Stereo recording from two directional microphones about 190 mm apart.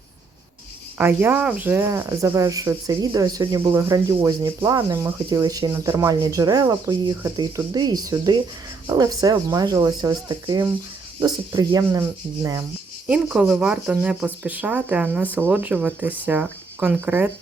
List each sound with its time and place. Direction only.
0.9 s speech: 10° right (ahead or behind)
13.1 s speech: 5° right (ahead or behind)